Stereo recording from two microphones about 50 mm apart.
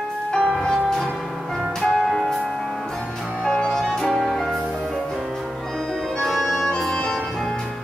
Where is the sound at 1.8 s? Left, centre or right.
Centre.